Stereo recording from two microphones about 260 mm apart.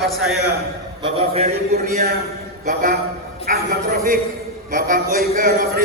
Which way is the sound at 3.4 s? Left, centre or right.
Right.